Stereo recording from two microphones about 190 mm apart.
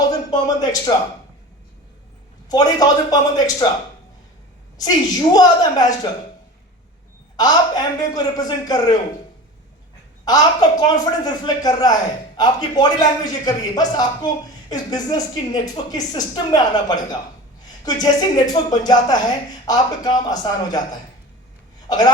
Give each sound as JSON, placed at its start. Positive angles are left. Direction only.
{"t": 0.1, "sound": "speech", "side_deg": 20}
{"t": 2.5, "sound": "speech", "side_deg": 20}
{"t": 4.8, "sound": "speech", "side_deg": 20}
{"t": 7.3, "sound": "speech", "side_deg": 20}
{"t": 10.2, "sound": "speech", "side_deg": 20}
{"t": 21.8, "sound": "a sound", "side_deg": 20}